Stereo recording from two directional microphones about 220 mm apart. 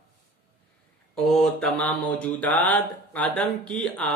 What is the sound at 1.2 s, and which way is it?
Mantra, centre (ahead or behind).